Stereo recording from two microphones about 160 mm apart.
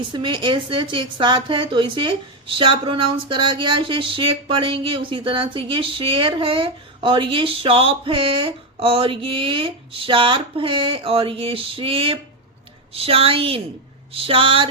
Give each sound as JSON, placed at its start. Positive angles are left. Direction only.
{"t": 0.1, "sound": "a woman's voice", "side_deg": -30}